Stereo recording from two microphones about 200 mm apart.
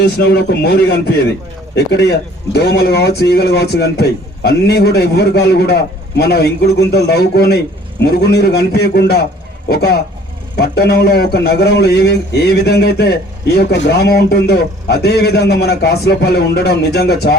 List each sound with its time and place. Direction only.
0.2 s a man's voice: 55° left (ahead or behind)